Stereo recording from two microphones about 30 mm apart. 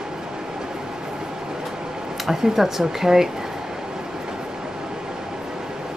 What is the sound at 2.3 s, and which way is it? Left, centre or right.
Speech, centre.